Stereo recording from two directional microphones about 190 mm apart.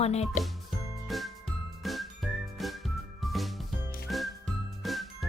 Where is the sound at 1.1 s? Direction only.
Centre (ahead or behind).